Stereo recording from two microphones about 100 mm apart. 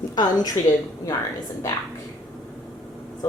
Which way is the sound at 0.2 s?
45° left (ahead or behind).